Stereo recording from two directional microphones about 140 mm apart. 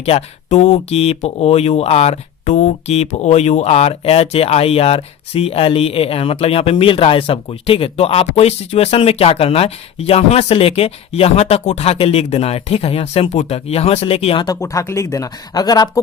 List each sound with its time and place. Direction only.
0.0 s speech: 50° left (ahead or behind)
14.4 s speech: 25° left (ahead or behind)